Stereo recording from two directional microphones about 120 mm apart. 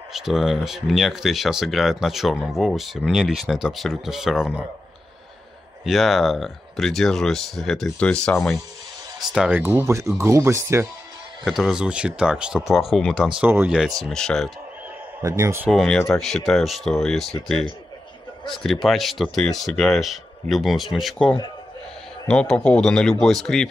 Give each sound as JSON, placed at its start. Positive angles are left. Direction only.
{"t": 0.1, "sound": "speech", "side_deg": -5}
{"t": 5.9, "sound": "speech", "side_deg": 0}
{"t": 9.2, "sound": "speech", "side_deg": -5}
{"t": 9.6, "sound": "speech", "side_deg": -20}
{"t": 11.4, "sound": "speech", "side_deg": 0}
{"t": 13.5, "sound": "speech", "side_deg": -20}
{"t": 14.0, "sound": "speech", "side_deg": 5}
{"t": 15.2, "sound": "speech", "side_deg": -25}
{"t": 15.7, "sound": "speech", "side_deg": 0}